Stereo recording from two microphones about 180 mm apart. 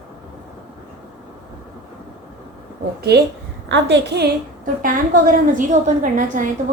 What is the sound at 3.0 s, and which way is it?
A woman's voice, 60° right (ahead or behind).